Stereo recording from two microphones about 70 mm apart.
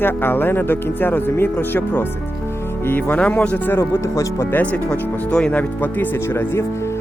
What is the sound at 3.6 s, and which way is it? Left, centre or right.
Speech, left.